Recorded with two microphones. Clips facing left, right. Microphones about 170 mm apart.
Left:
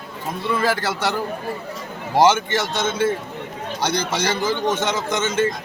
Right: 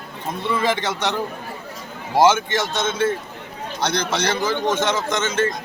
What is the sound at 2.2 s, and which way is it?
A man's voice, 15° left (ahead or behind).